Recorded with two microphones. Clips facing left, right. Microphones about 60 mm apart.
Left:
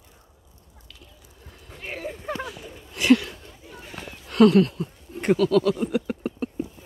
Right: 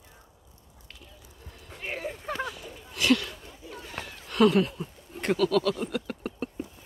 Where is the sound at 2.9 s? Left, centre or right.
Centre.